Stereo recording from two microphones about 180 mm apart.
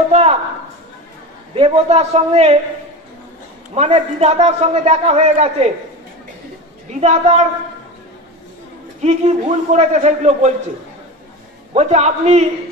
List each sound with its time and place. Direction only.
0.1 s a sound: 35° right (ahead or behind)
1.5 s a man's voice: 35° right (ahead or behind)
3.7 s a man's voice: 35° right (ahead or behind)
6.9 s a man's voice: 40° right (ahead or behind)
9.0 s a man's voice: 40° right (ahead or behind)
11.7 s a man's voice: 40° right (ahead or behind)